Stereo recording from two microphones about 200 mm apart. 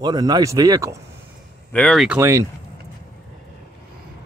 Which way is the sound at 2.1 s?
15° right (ahead or behind).